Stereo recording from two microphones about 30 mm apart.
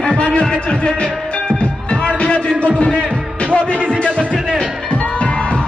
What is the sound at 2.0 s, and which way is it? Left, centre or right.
Music, left.